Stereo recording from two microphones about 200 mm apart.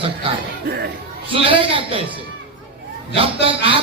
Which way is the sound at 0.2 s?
25° right (ahead or behind).